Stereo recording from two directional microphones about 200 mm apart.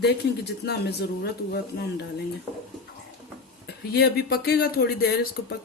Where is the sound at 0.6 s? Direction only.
55° left (ahead or behind).